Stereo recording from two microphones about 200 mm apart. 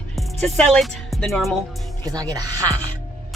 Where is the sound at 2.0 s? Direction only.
20° right (ahead or behind).